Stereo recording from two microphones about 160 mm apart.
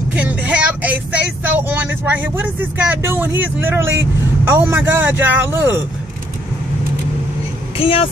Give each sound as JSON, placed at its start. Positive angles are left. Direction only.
{"t": 0.1, "sound": "vehicle", "side_deg": -10}
{"t": 4.5, "sound": "speech", "side_deg": -10}
{"t": 7.7, "sound": "speech", "side_deg": 35}